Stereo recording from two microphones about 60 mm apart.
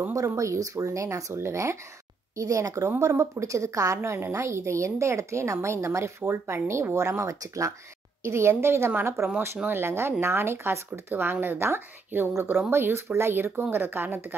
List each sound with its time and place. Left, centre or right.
0.4 s speech: right
2.3 s a woman's voice: right
8.2 s a woman's voice: right
9.1 s speech: centre
9.7 s a woman's voice: right